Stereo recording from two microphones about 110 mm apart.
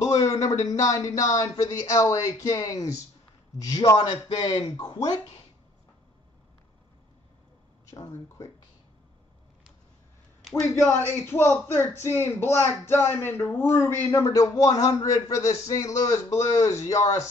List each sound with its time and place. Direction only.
0.0 s a sound: 35° left (ahead or behind)
0.7 s speech: 35° left (ahead or behind)
7.9 s speech: 30° left (ahead or behind)
10.5 s speech: 20° left (ahead or behind)